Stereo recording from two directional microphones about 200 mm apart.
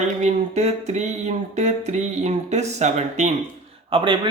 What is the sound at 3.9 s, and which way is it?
Speech, 25° right (ahead or behind).